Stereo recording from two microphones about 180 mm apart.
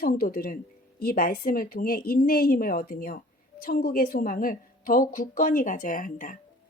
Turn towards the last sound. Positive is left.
turn(degrees=50)  # may be behind; listen again after turning